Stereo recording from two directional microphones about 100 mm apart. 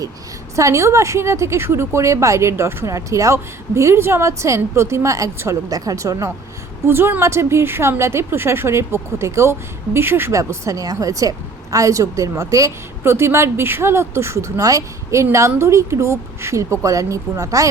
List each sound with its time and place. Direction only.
0.5 s a woman's voice: 30° right (ahead or behind)
6.8 s a woman's voice: 20° right (ahead or behind)